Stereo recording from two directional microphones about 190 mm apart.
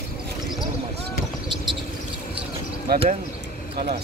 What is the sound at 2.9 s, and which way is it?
Speech, 55° right (ahead or behind).